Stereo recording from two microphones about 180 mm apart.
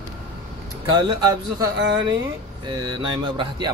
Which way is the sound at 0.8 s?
25° right (ahead or behind).